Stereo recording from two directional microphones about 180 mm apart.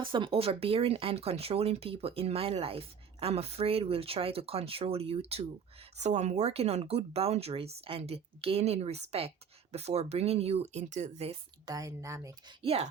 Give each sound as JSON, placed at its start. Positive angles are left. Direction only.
{"t": 0.1, "sound": "speech", "side_deg": -30}
{"t": 11.6, "sound": "speech", "side_deg": -20}
{"t": 12.6, "sound": "speech", "side_deg": -35}